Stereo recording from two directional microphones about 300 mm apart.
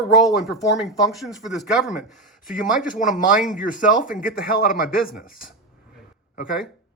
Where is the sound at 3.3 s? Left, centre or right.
Centre.